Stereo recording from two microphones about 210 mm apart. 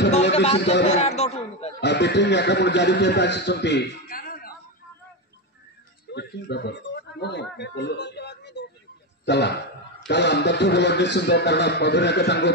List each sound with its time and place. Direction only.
0.3 s a sound: 30° left (ahead or behind)
0.8 s a man's voice: 30° left (ahead or behind)
1.8 s a man's voice: 55° left (ahead or behind)
6.1 s a man's voice: 55° left (ahead or behind)